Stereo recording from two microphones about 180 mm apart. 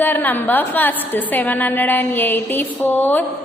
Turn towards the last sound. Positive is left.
turn(degrees=10)  # may be behind; listen again after turning